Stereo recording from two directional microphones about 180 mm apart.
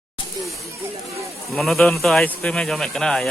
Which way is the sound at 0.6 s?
15° right (ahead or behind).